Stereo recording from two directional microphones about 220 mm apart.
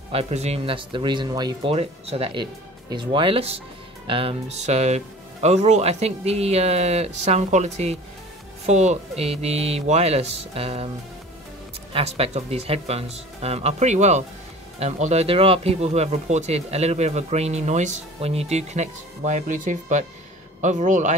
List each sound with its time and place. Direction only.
0.1 s speech: 30° right (ahead or behind)
11.9 s speech: 25° right (ahead or behind)